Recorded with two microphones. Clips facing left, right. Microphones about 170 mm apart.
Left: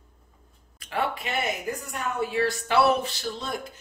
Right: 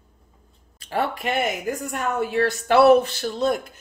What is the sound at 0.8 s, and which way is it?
Speech, 40° right (ahead or behind).